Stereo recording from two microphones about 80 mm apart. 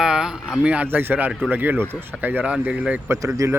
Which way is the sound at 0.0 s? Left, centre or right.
Centre.